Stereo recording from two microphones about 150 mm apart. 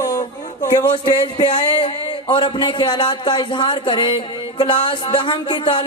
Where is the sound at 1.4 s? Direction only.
35° left (ahead or behind).